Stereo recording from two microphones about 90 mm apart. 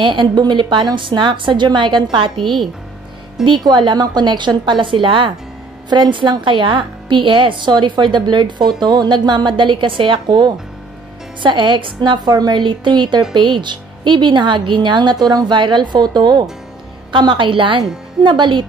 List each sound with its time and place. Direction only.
0.0 s a woman's voice: 60° right (ahead or behind)
3.4 s a woman's voice: 55° right (ahead or behind)
17.1 s a woman's voice: 65° right (ahead or behind)